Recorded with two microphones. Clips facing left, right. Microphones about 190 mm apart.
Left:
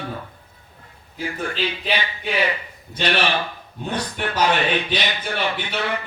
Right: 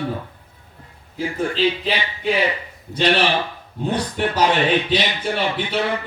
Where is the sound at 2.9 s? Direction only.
30° right (ahead or behind).